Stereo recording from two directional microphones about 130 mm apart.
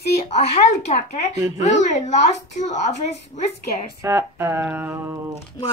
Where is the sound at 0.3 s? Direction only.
60° left (ahead or behind).